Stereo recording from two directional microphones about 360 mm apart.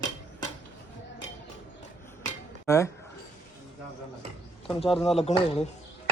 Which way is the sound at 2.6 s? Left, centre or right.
Centre.